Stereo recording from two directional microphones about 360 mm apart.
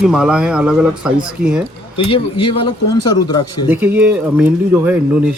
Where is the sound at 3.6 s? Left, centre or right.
Centre.